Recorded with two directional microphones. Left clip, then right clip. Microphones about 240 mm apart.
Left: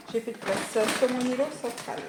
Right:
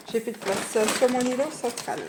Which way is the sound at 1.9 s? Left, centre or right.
Right.